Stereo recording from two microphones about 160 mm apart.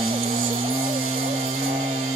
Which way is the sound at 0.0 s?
40° right (ahead or behind).